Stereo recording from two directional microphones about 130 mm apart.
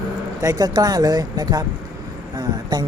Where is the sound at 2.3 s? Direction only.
30° right (ahead or behind).